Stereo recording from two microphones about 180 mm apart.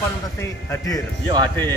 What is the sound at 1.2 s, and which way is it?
Speech, 25° right (ahead or behind).